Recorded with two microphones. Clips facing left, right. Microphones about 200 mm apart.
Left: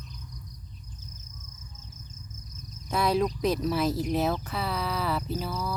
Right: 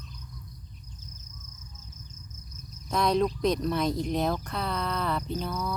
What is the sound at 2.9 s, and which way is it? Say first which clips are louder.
Speech: right 1 dB; 5° left (ahead or behind).